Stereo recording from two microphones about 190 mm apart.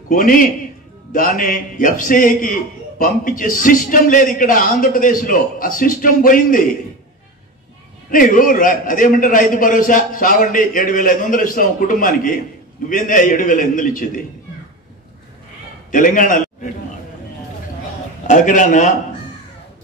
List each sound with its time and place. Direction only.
0.1 s a man's voice: 45° left (ahead or behind)
8.1 s a man's voice: 45° left (ahead or behind)
15.9 s a man's voice: 45° left (ahead or behind)
18.2 s a man's voice: 40° left (ahead or behind)